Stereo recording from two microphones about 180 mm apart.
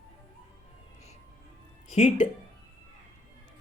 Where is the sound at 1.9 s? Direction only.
40° left (ahead or behind).